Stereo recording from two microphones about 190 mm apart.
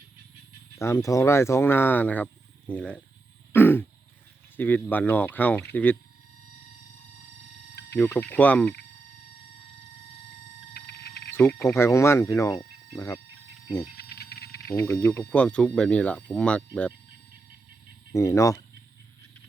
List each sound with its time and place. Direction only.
0.8 s speech: 15° left (ahead or behind)
3.5 s throat clearing: 10° left (ahead or behind)
4.5 s speech: 10° left (ahead or behind)
7.9 s speech: 5° left (ahead or behind)
10.8 s frog: 55° left (ahead or behind)
11.6 s speech: 15° left (ahead or behind)
13.9 s a sound: 55° left (ahead or behind)
14.8 s speech: 15° left (ahead or behind)
18.1 s speech: 15° left (ahead or behind)